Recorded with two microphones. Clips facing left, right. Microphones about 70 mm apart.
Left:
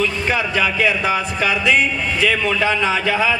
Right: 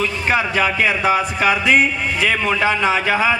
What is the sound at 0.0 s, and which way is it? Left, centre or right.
A man's voice, right.